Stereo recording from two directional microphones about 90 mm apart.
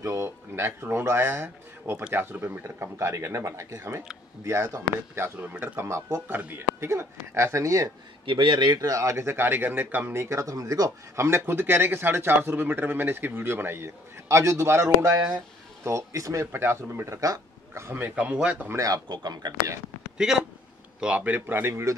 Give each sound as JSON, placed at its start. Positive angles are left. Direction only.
{"t": 0.0, "sound": "speech", "side_deg": -35}
{"t": 8.3, "sound": "speech", "side_deg": -65}
{"t": 10.2, "sound": "speech", "side_deg": -35}
{"t": 19.0, "sound": "speech", "side_deg": -50}
{"t": 20.2, "sound": "speech", "side_deg": -5}